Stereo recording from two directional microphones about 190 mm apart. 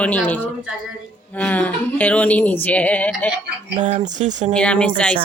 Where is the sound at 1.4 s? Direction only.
10° left (ahead or behind).